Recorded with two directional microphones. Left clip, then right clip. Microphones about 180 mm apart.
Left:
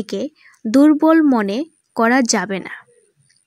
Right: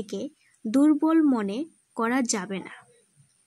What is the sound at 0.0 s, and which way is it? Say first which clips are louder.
Speech: left 9 dB; 35° left (ahead or behind).